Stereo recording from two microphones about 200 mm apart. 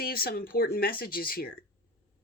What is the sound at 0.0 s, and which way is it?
Speech, 50° left (ahead or behind).